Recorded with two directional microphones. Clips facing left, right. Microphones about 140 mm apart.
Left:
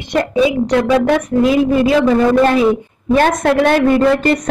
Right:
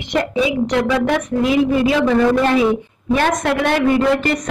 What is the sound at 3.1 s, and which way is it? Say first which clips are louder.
Speech: left 5 dB; 45° left (ahead or behind).